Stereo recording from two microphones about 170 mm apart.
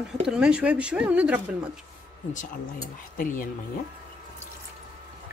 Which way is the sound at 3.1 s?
55° left (ahead or behind).